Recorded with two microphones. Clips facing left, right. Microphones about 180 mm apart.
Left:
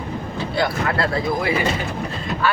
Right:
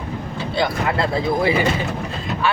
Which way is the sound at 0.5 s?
20° right (ahead or behind).